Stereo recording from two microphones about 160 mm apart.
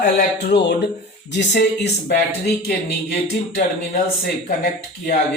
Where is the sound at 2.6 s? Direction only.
75° left (ahead or behind).